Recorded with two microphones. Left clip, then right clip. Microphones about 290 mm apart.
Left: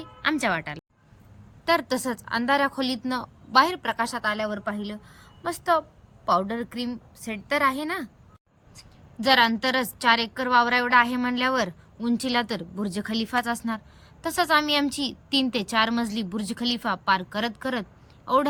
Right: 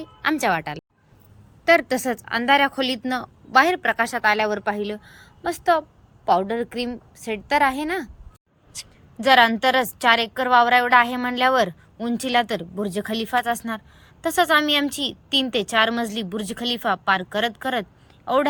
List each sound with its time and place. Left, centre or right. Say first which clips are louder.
0.0 s a woman's voice: right 3 dB; centre
1.6 s a woman's voice: right 6 dB; centre
9.2 s a woman's voice: right 5 dB; centre